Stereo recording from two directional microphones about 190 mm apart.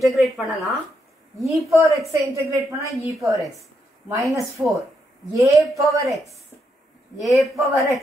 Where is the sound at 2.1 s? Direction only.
15° right (ahead or behind).